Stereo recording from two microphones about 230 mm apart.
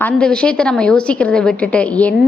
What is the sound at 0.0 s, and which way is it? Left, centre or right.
A woman's voice, centre.